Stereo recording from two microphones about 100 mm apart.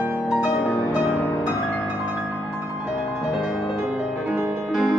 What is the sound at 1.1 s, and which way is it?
Music, 15° left (ahead or behind).